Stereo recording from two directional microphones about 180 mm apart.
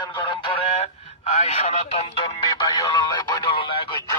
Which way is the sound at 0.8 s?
35° left (ahead or behind).